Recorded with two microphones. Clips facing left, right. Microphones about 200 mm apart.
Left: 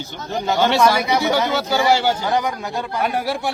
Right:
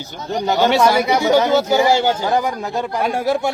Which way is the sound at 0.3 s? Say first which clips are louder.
Right 2 dB; 20° right (ahead or behind).